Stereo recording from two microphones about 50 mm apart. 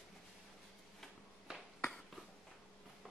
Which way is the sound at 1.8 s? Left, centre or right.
Centre.